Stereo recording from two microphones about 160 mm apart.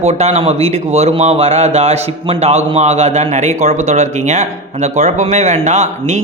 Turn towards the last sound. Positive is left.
turn(degrees=-45)  # may be behind; listen again after turning